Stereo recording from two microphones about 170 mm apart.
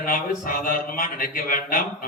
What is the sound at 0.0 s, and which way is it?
A man's voice, 55° left (ahead or behind).